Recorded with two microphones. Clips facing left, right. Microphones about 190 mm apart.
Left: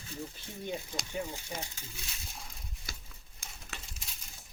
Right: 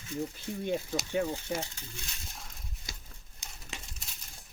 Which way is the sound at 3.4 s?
20° right (ahead or behind).